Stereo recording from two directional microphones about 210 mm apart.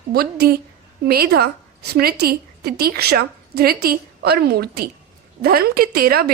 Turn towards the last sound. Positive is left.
turn(degrees=-45)  # may be behind; listen again after turning